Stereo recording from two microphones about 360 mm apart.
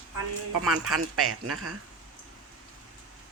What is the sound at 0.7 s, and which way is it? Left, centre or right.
A man's voice, right.